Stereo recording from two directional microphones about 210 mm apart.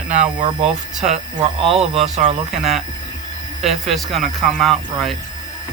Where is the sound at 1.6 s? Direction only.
30° right (ahead or behind).